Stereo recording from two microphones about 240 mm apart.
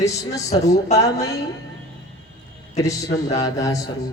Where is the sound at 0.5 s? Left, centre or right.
Left.